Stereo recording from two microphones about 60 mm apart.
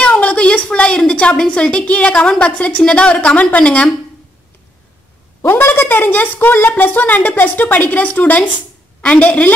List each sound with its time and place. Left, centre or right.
0.0 s a sound: left
1.3 s a woman's voice: centre
5.5 s a woman's voice: left